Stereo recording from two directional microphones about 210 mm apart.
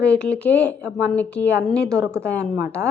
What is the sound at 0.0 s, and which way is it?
Speech, 5° left (ahead or behind).